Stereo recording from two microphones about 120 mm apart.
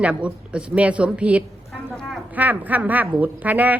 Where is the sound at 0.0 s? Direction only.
10° right (ahead or behind).